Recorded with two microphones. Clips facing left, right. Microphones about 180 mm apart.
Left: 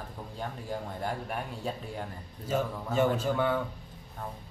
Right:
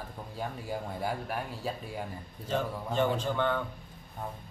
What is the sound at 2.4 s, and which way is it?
A man's voice, 10° left (ahead or behind).